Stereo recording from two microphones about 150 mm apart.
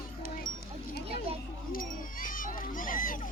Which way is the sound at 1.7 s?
70° left (ahead or behind).